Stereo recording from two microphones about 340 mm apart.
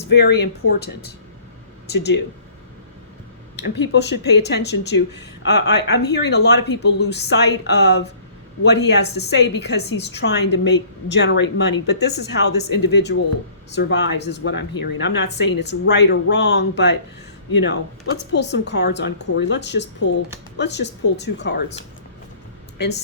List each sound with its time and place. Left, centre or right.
0.1 s a woman's voice: left
2.0 s a woman's voice: left
3.5 s a woman's voice: left